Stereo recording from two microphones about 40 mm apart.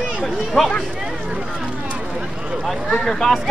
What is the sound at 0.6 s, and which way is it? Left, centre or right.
Speech, centre.